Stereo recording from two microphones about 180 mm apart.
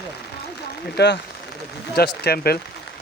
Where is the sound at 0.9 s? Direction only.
70° left (ahead or behind).